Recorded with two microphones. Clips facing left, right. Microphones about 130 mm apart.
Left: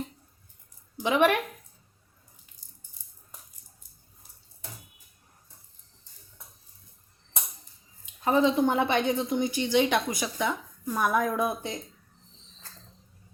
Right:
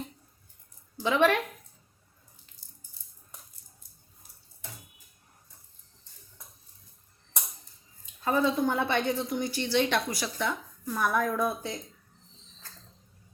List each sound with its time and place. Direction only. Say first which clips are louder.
0.9 s a woman's voice: left 1 dB; 15° left (ahead or behind)
8.2 s a woman's voice: left 3 dB; 20° left (ahead or behind)